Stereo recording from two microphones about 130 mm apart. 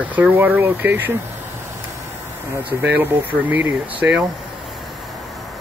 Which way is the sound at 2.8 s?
15° right (ahead or behind).